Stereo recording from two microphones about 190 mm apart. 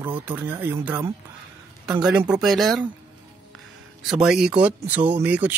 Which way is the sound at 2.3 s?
Centre (ahead or behind).